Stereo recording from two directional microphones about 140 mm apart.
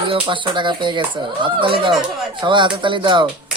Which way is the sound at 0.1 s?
35° right (ahead or behind).